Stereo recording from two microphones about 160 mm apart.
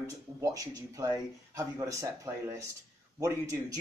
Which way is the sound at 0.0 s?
20° right (ahead or behind).